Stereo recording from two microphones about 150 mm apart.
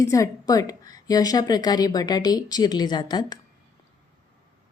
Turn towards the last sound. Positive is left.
turn(degrees=30)  # may be behind; listen again after turning